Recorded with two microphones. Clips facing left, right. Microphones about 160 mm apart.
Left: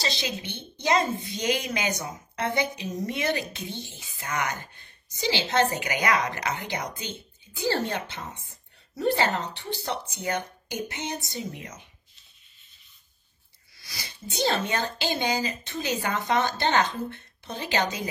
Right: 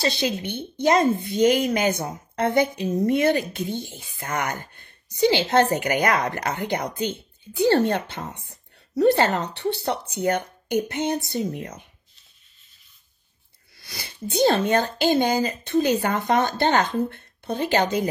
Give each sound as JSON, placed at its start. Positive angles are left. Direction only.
{"t": 0.0, "sound": "speech", "side_deg": -55}
{"t": 10.9, "sound": "music", "side_deg": -55}
{"t": 13.7, "sound": "speech", "side_deg": -60}